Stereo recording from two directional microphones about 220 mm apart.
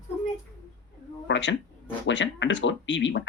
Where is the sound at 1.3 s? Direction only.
55° left (ahead or behind).